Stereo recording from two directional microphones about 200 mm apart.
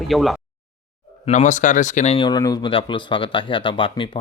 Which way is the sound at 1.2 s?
40° left (ahead or behind).